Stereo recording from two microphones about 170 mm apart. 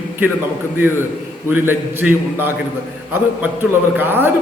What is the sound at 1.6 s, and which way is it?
Speech, 10° right (ahead or behind).